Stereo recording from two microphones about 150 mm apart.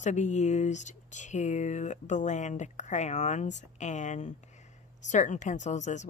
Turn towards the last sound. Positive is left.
turn(degrees=50)  # may be behind; listen again after turning